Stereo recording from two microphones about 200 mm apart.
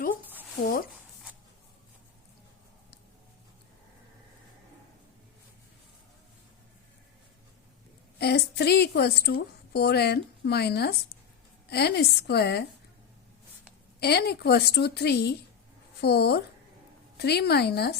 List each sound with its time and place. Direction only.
8.2 s a woman's voice: 55° left (ahead or behind)
14.0 s a woman's voice: 55° left (ahead or behind)